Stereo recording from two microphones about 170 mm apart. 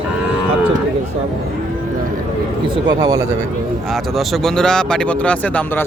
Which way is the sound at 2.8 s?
20° right (ahead or behind).